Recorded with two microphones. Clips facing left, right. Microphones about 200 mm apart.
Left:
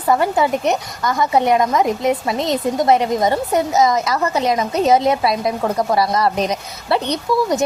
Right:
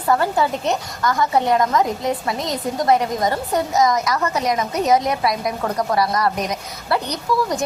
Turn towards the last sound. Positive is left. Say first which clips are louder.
# left 4 dB
turn(degrees=25)  # may be behind; listen again after turning